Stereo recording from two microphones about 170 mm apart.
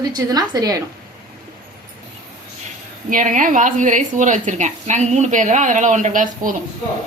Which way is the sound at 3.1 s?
50° right (ahead or behind).